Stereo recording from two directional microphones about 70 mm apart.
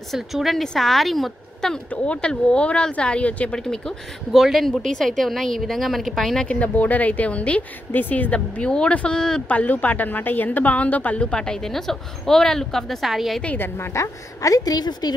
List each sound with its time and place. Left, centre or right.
0.1 s speech: centre
1.9 s speech: centre
6.4 s speech: centre
13.6 s a woman's voice: left